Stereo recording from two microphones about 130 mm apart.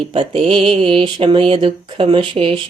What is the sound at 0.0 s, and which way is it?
Mantra, 45° right (ahead or behind).